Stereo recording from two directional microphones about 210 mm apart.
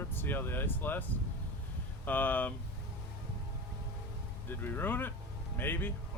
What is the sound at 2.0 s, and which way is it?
Speech, 10° left (ahead or behind).